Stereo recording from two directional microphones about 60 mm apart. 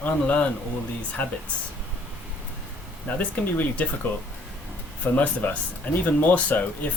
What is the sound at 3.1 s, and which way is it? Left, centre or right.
Speech, left.